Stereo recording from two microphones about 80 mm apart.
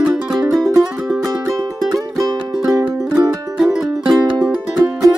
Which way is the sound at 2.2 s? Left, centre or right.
Right.